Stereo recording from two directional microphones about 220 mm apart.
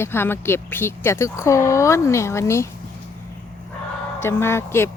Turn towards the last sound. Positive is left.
turn(degrees=10)  # may be behind; listen again after turning